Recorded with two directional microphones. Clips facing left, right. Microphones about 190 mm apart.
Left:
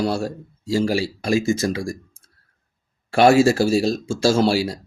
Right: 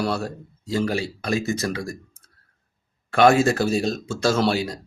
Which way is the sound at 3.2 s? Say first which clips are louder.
Left 3 dB; 30° left (ahead or behind).